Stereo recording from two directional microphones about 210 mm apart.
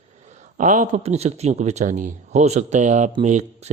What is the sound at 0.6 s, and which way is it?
Speech, 35° right (ahead or behind).